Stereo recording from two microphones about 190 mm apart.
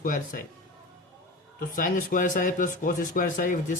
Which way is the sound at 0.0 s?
45° left (ahead or behind).